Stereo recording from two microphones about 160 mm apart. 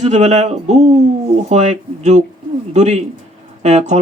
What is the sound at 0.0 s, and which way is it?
Speech, 45° right (ahead or behind).